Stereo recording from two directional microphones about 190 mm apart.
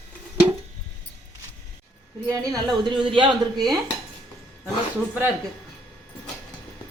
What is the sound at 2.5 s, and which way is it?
Speech, 20° right (ahead or behind).